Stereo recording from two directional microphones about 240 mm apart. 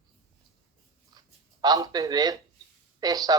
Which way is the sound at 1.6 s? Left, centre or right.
Centre.